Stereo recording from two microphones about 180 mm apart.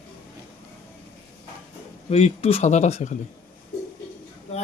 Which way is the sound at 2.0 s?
35° left (ahead or behind).